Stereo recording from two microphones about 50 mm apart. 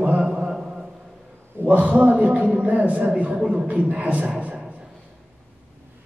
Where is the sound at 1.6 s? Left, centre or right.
Right.